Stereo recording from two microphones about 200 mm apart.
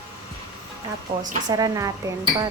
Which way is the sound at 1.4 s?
20° right (ahead or behind).